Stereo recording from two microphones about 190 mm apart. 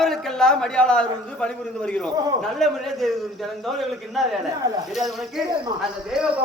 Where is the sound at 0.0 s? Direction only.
Centre (ahead or behind).